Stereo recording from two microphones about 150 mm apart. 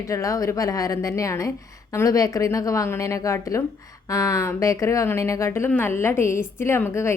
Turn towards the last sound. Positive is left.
turn(degrees=15)  # may be behind; listen again after turning